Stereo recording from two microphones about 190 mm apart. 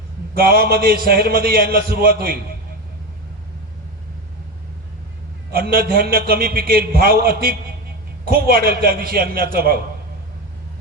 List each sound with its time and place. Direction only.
0.3 s a man's voice: 50° right (ahead or behind)
5.5 s a man's voice: 55° right (ahead or behind)